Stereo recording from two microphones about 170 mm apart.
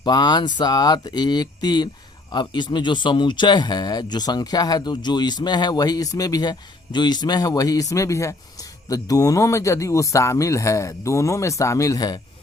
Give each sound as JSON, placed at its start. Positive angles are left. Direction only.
{"t": 0.0, "sound": "speech", "side_deg": 25}